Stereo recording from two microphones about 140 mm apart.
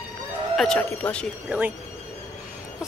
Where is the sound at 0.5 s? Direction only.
5° left (ahead or behind).